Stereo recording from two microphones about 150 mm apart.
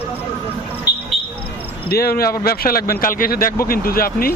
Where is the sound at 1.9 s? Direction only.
90° left.